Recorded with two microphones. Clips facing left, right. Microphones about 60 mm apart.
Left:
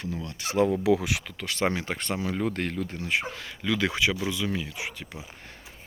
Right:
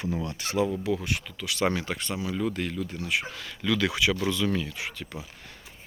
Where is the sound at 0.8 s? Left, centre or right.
Left.